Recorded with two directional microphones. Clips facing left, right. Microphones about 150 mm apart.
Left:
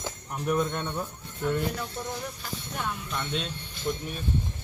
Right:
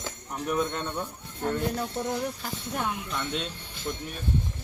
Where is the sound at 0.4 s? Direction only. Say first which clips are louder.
Left 1 dB; centre (ahead or behind).